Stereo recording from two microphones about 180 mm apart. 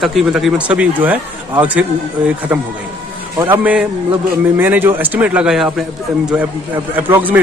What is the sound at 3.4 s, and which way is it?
A man's voice, 10° right (ahead or behind).